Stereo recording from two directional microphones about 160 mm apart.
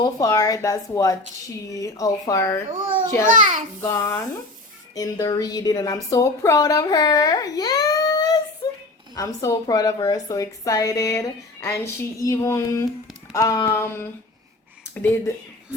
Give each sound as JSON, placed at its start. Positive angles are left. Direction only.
{"t": 0.0, "sound": "a woman's voice", "side_deg": 20}
{"t": 3.2, "sound": "a child's voice", "side_deg": -55}
{"t": 3.8, "sound": "a woman's voice", "side_deg": 20}